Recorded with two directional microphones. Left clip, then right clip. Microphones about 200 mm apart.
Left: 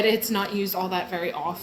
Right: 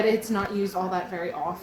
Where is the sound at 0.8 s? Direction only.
55° left (ahead or behind).